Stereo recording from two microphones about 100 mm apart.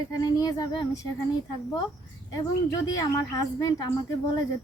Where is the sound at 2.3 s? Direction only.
35° left (ahead or behind).